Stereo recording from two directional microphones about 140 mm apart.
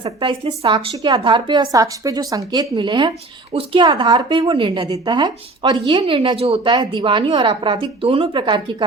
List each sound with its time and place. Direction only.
0.0 s a woman's voice: 35° right (ahead or behind)